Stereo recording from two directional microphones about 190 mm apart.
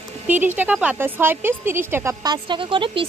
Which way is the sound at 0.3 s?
10° right (ahead or behind).